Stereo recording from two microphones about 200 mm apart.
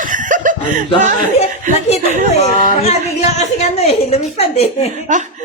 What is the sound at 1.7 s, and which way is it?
Speech, 40° right (ahead or behind).